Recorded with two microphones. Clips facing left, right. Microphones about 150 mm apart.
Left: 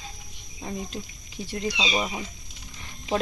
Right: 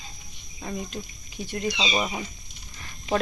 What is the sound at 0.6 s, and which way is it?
Speech, 30° left (ahead or behind).